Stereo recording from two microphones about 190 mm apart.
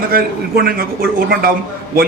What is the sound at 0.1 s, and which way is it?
Speech, 50° right (ahead or behind).